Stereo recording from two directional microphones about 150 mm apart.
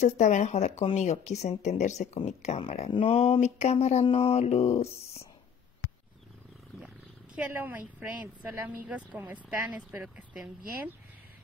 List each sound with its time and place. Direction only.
0.0 s speech: 55° left (ahead or behind)
7.3 s a woman's voice: 10° right (ahead or behind)